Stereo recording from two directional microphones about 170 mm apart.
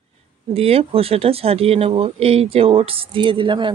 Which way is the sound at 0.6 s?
35° right (ahead or behind).